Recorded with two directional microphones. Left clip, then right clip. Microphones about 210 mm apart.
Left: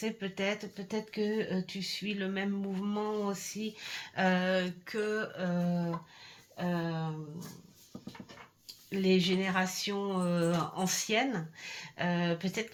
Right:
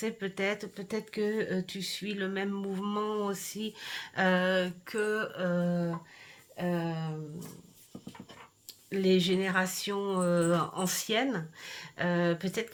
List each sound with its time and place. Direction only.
0.0 s speech: 35° right (ahead or behind)
8.9 s speech: 30° right (ahead or behind)